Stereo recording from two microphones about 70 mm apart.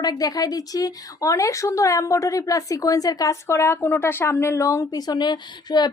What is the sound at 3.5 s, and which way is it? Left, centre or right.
Speech, left.